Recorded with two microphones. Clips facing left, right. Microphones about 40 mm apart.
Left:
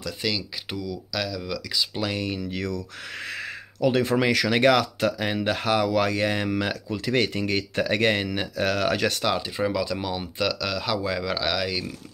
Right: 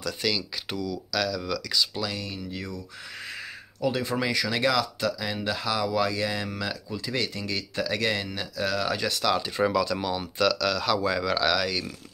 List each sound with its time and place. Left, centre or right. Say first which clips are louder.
0.0 s speech: even; centre
2.0 s speech: left 4 dB; left
2.3 s speech: left 6 dB; left
9.8 s speech: right 1 dB; centre